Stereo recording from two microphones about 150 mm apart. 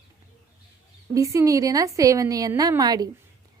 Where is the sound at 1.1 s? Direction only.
20° right (ahead or behind).